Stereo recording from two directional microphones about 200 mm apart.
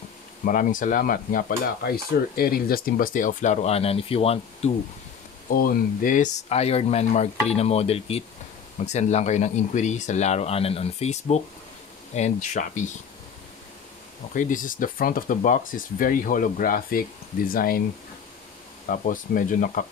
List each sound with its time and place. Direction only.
0.5 s speech: 40° left (ahead or behind)
5.5 s speech: 45° left (ahead or behind)
14.3 s speech: 40° left (ahead or behind)
18.9 s speech: 40° left (ahead or behind)